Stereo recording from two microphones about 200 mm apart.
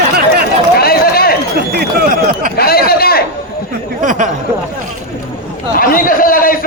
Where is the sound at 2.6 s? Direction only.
50° left (ahead or behind).